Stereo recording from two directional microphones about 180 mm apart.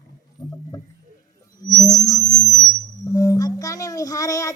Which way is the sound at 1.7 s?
20° left (ahead or behind).